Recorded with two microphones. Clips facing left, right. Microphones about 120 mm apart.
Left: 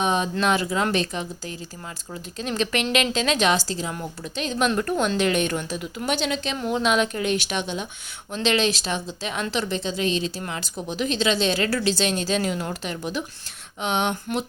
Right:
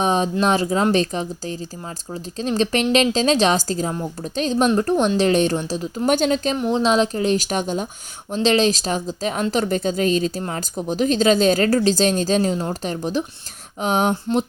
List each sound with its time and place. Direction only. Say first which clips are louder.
0.0 s a woman's voice: right 4 dB; 35° right (ahead or behind)
6.1 s a woman's voice: right 7 dB; 45° right (ahead or behind)
6.6 s a woman's voice: right 2 dB; 30° right (ahead or behind)